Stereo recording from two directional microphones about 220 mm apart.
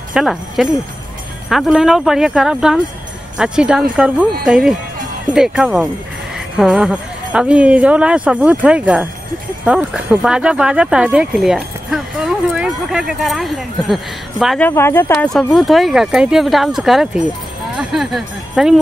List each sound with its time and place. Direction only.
0.1 s speech: centre (ahead or behind)
14.7 s speech: 10° left (ahead or behind)